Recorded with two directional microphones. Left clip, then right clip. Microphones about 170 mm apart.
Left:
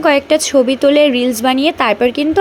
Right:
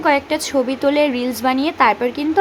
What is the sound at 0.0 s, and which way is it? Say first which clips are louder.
A woman's voice: left 5 dB; 30° left (ahead or behind).